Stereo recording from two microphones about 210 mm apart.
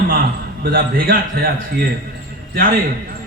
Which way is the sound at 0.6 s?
45° right (ahead or behind).